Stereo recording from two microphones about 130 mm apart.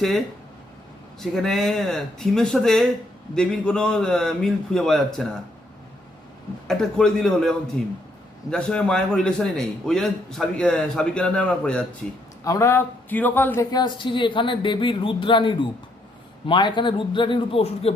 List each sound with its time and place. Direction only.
1.2 s a man's voice: centre (ahead or behind)
6.7 s a man's voice: 5° left (ahead or behind)
12.5 s speech: 20° left (ahead or behind)
13.7 s speech: 35° left (ahead or behind)